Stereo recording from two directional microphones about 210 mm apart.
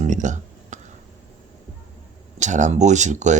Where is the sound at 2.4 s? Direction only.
35° right (ahead or behind).